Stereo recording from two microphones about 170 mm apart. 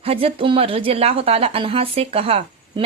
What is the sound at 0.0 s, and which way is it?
Speech, 35° right (ahead or behind).